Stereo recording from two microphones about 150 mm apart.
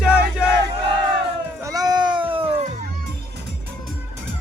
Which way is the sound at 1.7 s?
25° right (ahead or behind).